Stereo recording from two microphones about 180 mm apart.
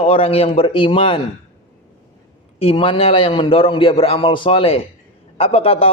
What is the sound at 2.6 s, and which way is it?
A man's voice, 30° left (ahead or behind).